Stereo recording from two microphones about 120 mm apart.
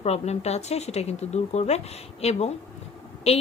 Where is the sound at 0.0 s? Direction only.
65° left (ahead or behind).